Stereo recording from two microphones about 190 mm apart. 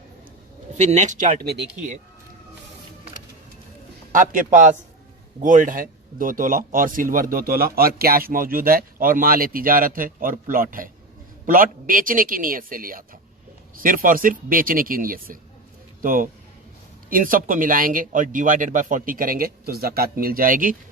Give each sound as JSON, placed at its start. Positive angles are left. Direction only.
{"t": 0.8, "sound": "speech", "side_deg": -40}
{"t": 4.1, "sound": "speech", "side_deg": -45}